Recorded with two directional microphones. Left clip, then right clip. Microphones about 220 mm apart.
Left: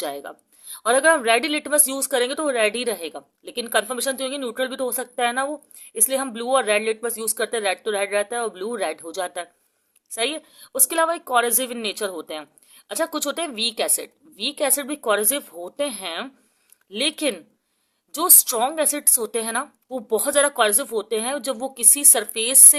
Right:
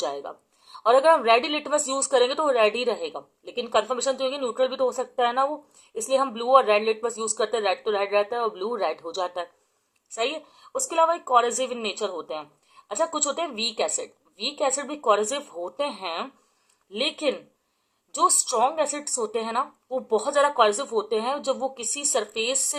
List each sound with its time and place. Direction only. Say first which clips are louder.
0.0 s a woman's voice: even; 35° left (ahead or behind)